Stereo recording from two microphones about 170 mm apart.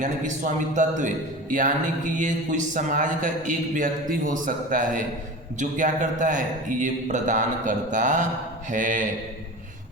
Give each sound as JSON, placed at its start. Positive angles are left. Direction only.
{"t": 0.0, "sound": "a man's voice", "side_deg": -45}